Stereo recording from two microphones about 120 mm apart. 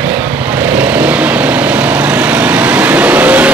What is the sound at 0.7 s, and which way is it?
Vehicle, 10° right (ahead or behind).